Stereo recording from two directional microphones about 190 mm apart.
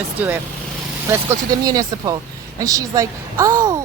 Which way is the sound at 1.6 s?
20° right (ahead or behind).